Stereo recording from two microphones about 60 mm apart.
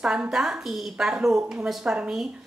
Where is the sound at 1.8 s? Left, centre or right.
Centre.